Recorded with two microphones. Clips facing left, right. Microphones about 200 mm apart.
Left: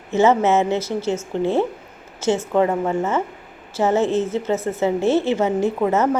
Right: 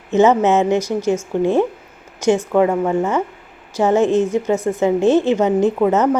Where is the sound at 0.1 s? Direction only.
15° right (ahead or behind).